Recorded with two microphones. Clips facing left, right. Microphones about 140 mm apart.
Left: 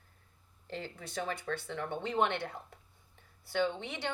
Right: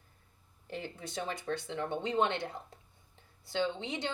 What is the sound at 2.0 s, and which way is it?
Speech, 60° left (ahead or behind).